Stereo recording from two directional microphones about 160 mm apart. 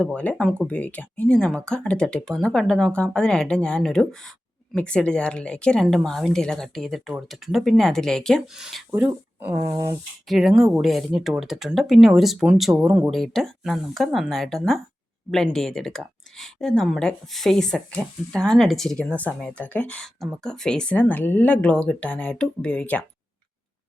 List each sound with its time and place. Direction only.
0.0 s speech: 5° left (ahead or behind); by 10.0 s 20° right (ahead or behind)
10.2 s speech: centre (ahead or behind)